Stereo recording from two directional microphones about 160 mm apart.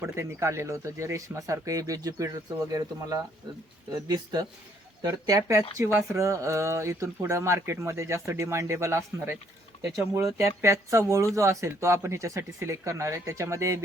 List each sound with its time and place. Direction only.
0.0 s speech: 15° right (ahead or behind)
4.1 s speech: 25° right (ahead or behind)